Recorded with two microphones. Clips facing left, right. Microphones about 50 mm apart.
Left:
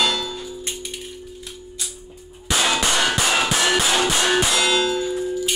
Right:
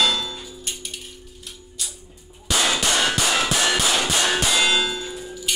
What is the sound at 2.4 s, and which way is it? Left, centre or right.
Clang, left.